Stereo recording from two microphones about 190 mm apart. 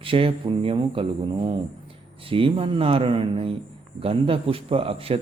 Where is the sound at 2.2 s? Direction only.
30° right (ahead or behind).